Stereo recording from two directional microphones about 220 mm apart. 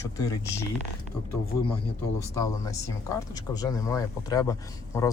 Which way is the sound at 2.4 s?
15° left (ahead or behind).